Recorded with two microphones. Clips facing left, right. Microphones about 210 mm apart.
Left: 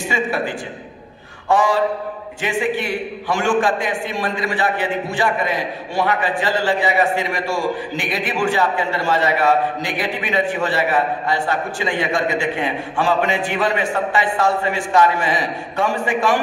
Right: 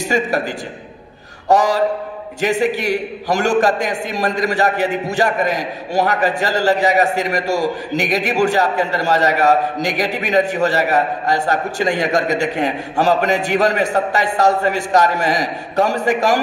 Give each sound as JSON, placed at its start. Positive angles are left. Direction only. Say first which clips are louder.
{"t": 0.0, "sound": "a man's voice", "louder": "right 3 dB", "side_deg": -40}